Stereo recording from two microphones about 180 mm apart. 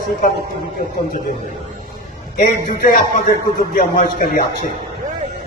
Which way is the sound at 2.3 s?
50° left (ahead or behind).